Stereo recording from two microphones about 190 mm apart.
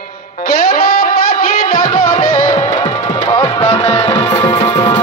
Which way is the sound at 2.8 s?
25° left (ahead or behind).